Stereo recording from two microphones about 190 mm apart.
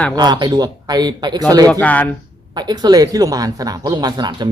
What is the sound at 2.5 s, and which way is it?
Speech, 20° right (ahead or behind).